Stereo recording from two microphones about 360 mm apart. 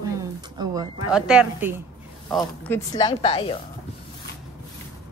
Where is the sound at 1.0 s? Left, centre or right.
Centre.